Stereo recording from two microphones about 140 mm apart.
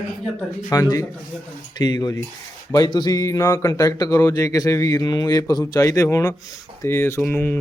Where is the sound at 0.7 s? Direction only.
25° left (ahead or behind).